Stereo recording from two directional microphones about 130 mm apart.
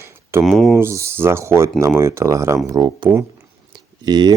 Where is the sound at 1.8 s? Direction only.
20° right (ahead or behind).